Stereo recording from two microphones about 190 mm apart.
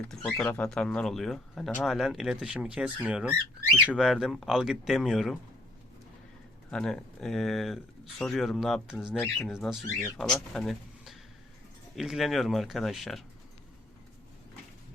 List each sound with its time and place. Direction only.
0.2 s speech: 10° left (ahead or behind)
6.7 s speech: 5° left (ahead or behind)